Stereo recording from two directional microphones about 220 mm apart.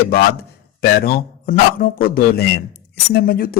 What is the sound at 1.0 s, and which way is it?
A man's voice, 40° left (ahead or behind).